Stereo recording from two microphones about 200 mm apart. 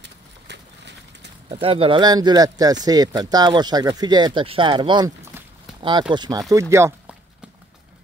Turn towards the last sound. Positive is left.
turn(degrees=-10)  # may be behind; listen again after turning